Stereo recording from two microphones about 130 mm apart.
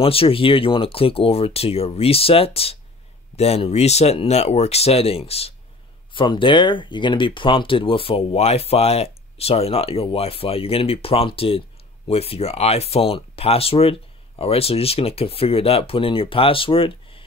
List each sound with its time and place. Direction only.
0.0 s speech: 45° left (ahead or behind)
6.1 s speech: 40° left (ahead or behind)